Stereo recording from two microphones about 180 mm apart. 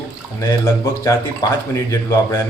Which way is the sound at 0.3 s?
15° left (ahead or behind).